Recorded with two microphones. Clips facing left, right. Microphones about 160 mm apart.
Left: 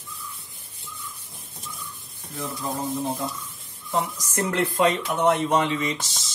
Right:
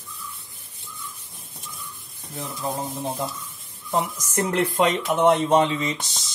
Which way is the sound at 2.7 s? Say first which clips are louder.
Left 2 dB; 20° right (ahead or behind).